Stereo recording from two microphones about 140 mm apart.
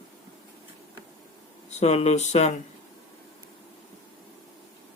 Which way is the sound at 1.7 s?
50° left (ahead or behind).